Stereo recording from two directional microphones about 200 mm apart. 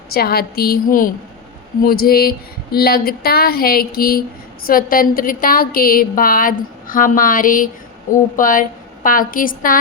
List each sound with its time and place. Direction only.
0.1 s a woman's voice: 50° left (ahead or behind)